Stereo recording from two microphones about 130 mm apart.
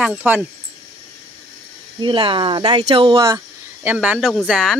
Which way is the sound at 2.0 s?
40° right (ahead or behind).